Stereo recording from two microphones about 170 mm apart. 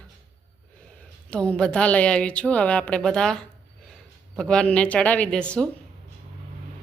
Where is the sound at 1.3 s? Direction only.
5° left (ahead or behind).